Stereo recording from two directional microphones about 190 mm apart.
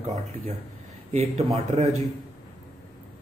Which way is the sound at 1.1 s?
30° right (ahead or behind).